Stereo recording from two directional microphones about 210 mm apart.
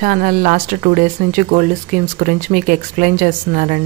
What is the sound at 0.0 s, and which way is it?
Speech, 40° right (ahead or behind).